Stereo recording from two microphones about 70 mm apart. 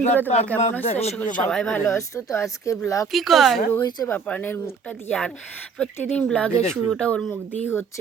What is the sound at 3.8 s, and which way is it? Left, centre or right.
Speech, left.